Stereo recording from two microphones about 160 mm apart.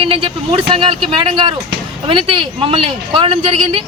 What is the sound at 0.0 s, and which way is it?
Vehicle, 35° right (ahead or behind).